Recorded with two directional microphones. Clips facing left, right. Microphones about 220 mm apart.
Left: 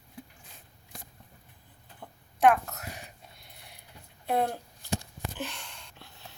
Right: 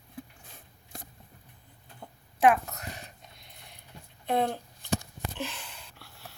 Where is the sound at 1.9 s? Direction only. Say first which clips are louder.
Even; centre (ahead or behind).